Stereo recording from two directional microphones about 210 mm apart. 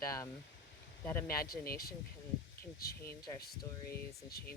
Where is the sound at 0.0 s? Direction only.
15° left (ahead or behind).